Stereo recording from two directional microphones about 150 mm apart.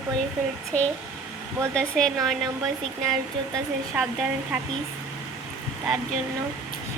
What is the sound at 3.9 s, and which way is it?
Speech, 5° right (ahead or behind).